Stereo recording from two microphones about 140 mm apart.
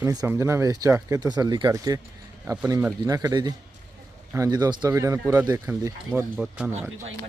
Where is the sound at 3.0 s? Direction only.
25° right (ahead or behind).